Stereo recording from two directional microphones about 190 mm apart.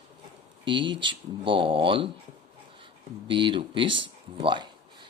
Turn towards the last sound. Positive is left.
turn(degrees=-25)  # may be behind; listen again after turning